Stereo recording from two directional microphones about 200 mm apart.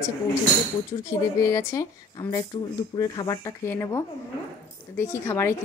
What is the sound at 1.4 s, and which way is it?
Speech, 15° left (ahead or behind).